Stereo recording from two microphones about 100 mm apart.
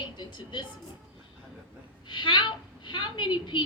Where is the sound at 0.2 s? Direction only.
55° left (ahead or behind).